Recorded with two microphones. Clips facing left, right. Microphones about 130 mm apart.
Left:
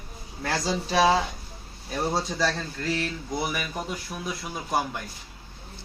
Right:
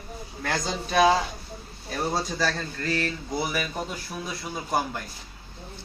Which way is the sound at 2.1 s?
Centre (ahead or behind).